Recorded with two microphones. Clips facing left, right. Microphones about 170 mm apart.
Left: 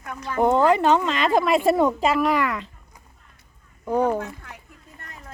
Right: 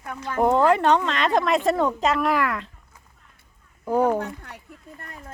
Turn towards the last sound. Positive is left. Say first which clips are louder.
# right 1 dB
turn(degrees=-35)  # may be behind; listen again after turning